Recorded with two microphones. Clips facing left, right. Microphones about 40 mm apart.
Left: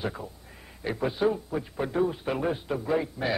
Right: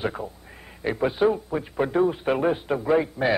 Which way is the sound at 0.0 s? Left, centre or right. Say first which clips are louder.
Right 5 dB; right.